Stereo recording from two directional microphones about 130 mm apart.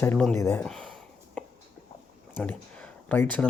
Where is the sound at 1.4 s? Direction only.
5° left (ahead or behind).